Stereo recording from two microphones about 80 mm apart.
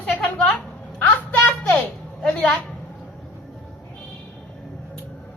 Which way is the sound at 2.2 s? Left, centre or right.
Centre.